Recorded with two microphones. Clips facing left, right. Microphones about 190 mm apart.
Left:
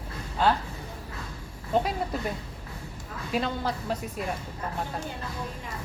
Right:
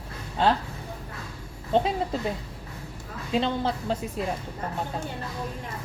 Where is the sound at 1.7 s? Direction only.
30° right (ahead or behind).